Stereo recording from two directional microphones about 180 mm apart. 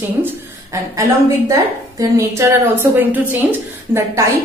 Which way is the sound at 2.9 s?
10° right (ahead or behind).